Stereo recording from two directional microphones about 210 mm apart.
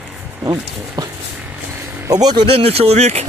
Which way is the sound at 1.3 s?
10° right (ahead or behind).